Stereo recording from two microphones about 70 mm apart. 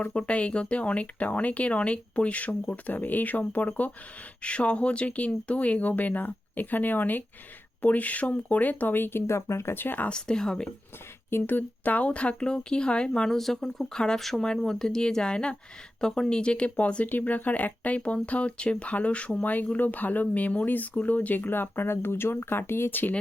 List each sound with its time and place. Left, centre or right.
0.0 s speech: centre
10.1 s speech: centre
11.3 s speech: left